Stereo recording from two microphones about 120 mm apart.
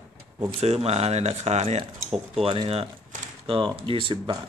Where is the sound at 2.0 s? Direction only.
Centre (ahead or behind).